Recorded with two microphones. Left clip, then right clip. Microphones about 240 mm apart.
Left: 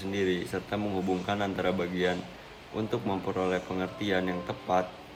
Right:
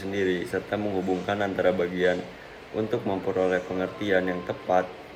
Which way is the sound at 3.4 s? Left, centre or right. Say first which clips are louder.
Right 6 dB; left.